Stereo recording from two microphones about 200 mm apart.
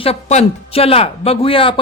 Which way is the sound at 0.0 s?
30° left (ahead or behind).